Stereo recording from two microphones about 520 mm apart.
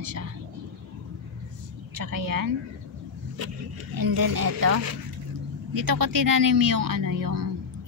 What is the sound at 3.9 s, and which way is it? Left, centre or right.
A woman's voice, right.